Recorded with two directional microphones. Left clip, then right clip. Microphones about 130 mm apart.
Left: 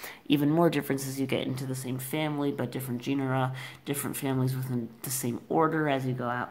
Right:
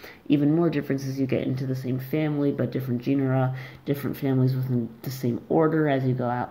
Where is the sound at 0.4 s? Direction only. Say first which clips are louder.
Even; 45° left (ahead or behind); by 1.7 s 25° left (ahead or behind).